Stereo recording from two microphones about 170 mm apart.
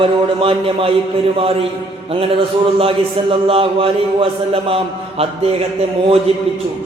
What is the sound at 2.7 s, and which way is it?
A man's voice, 35° right (ahead or behind).